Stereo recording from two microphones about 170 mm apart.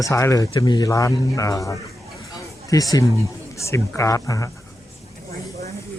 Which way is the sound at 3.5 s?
15° left (ahead or behind).